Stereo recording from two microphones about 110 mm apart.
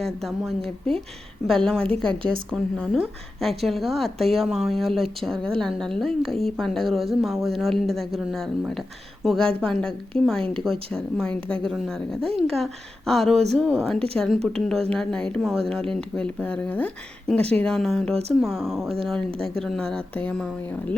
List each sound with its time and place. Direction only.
0.0 s a woman's voice: centre (ahead or behind)
18.1 s speech: 70° right (ahead or behind)
18.4 s a woman's voice: centre (ahead or behind)